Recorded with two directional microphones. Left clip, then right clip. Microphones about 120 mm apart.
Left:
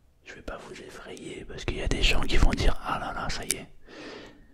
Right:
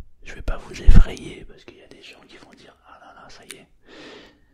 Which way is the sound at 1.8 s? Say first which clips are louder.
Left 17 dB; 80° left.